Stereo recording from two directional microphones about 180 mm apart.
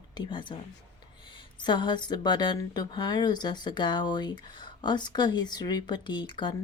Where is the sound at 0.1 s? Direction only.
25° left (ahead or behind).